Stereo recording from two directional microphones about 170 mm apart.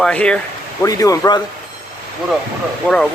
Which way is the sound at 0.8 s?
20° left (ahead or behind).